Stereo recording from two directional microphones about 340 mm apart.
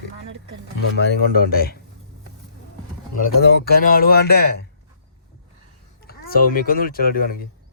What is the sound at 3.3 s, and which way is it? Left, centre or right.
Speech, left.